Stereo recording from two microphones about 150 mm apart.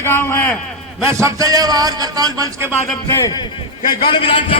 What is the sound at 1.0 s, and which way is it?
A man's voice, 20° right (ahead or behind).